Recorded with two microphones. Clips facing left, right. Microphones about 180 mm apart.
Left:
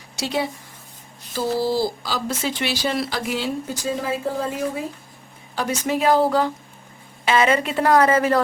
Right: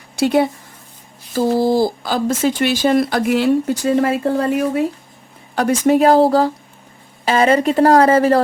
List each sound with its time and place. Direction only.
0.2 s speech: 55° right (ahead or behind)
5.5 s a woman's voice: 50° right (ahead or behind); by 8.4 s 35° right (ahead or behind)